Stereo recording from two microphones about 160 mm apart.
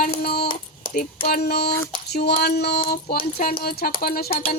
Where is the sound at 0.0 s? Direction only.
75° left (ahead or behind).